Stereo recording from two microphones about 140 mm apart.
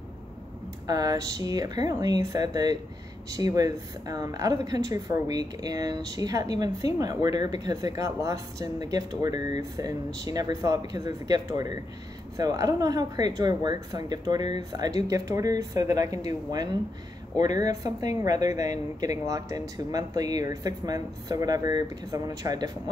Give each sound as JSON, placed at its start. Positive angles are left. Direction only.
{"t": 0.8, "sound": "speech", "side_deg": -25}